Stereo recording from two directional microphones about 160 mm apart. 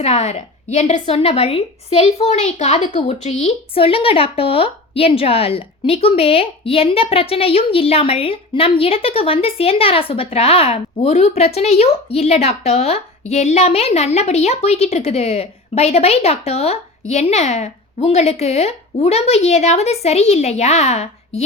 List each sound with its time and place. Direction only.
0.0 s a woman's voice: 45° left (ahead or behind)